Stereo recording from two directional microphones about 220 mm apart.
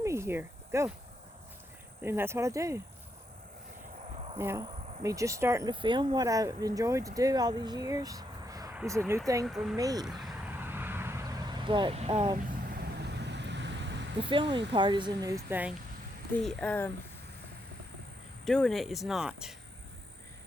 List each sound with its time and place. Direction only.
0.0 s speech: 15° right (ahead or behind)
2.0 s speech: 10° right (ahead or behind)
4.4 s speech: 10° right (ahead or behind)
9.5 s speech: centre (ahead or behind)
9.7 s speech: 15° right (ahead or behind)
10.1 s vehicle: centre (ahead or behind); by 12.5 s 30° right (ahead or behind)
12.8 s vehicle: 50° right (ahead or behind)
14.2 s speech: 20° right (ahead or behind)
16.4 s speech: 5° left (ahead or behind)
18.4 s speech: centre (ahead or behind)